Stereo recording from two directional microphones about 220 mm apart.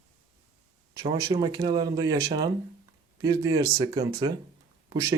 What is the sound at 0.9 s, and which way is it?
Speech, 15° right (ahead or behind).